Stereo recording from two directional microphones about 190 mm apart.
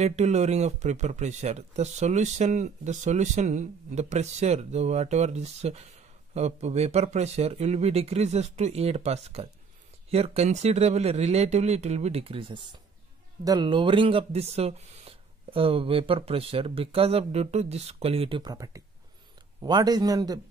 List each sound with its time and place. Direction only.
0.0 s speech: 35° right (ahead or behind)